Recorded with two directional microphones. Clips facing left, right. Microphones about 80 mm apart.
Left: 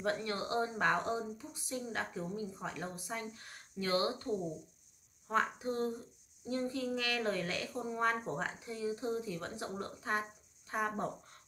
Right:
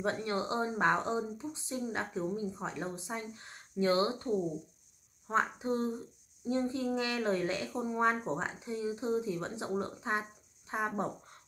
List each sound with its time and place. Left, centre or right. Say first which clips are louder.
0.0 s speech: right 3 dB; right
5.3 s speech: right 3 dB; right